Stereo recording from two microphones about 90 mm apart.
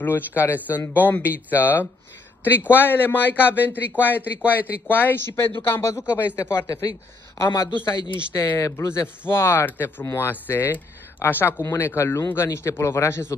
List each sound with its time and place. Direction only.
0.0 s speech: 25° left (ahead or behind)
4.4 s speech: 15° right (ahead or behind)
4.8 s speech: 25° left (ahead or behind)